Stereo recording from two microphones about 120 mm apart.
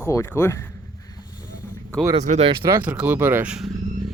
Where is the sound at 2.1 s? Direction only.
65° right (ahead or behind).